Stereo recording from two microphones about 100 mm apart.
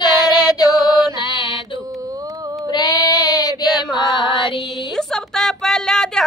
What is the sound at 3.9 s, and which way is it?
Music, 50° left (ahead or behind).